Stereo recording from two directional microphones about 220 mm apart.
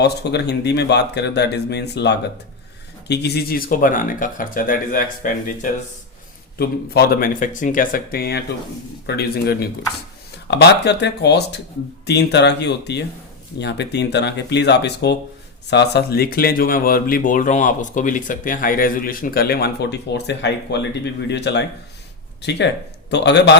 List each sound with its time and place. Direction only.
0.0 s speech: 50° left (ahead or behind)
6.6 s speech: 45° left (ahead or behind)